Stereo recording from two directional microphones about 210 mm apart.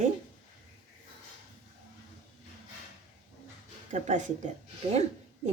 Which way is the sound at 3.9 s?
35° right (ahead or behind).